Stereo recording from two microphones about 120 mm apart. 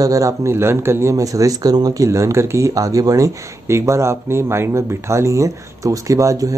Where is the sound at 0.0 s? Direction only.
30° right (ahead or behind).